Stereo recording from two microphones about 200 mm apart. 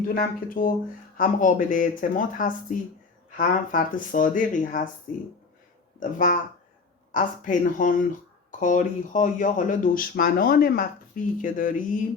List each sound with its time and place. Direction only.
0.1 s speech: 45° left (ahead or behind)